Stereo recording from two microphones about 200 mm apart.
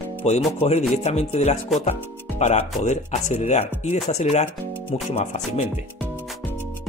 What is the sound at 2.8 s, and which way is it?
Speech, 35° left (ahead or behind).